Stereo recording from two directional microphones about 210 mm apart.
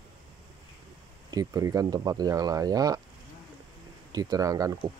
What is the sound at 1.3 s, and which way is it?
Speech, 15° right (ahead or behind).